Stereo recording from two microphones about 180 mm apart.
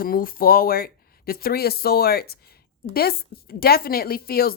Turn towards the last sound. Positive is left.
turn(degrees=55)  # may be behind; listen again after turning